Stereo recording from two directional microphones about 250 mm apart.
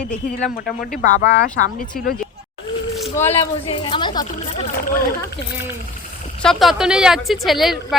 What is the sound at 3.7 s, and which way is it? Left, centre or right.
Speech, centre.